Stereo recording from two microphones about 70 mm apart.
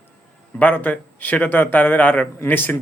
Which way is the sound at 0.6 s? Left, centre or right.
Left.